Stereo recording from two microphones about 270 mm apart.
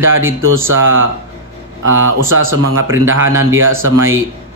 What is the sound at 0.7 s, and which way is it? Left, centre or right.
Fowl, right.